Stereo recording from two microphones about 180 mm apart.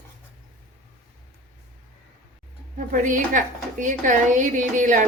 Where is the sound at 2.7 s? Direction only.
50° right (ahead or behind).